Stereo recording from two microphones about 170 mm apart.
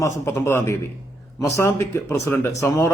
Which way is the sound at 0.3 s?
15° left (ahead or behind).